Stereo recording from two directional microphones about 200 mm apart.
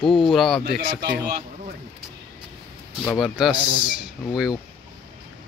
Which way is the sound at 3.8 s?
Centre (ahead or behind).